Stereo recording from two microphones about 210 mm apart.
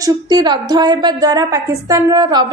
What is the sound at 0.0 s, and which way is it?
A woman's voice, 20° right (ahead or behind).